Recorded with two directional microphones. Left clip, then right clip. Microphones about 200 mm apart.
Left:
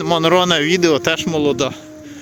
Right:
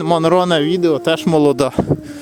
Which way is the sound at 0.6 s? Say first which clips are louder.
Left 1 dB; centre (ahead or behind).